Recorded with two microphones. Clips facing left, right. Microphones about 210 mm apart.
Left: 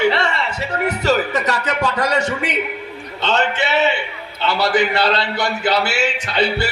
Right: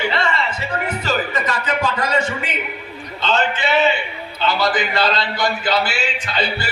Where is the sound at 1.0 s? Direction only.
70° left (ahead or behind).